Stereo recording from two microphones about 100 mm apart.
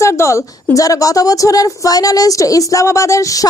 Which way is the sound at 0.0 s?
30° left (ahead or behind).